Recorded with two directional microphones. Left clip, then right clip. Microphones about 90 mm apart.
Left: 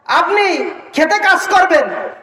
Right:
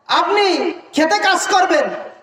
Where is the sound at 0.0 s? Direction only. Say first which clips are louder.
Left 2 dB; 35° right (ahead or behind).